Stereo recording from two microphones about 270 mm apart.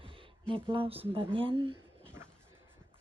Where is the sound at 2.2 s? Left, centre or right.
Centre.